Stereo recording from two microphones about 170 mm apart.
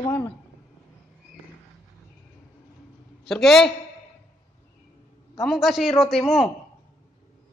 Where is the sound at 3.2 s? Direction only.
Centre (ahead or behind).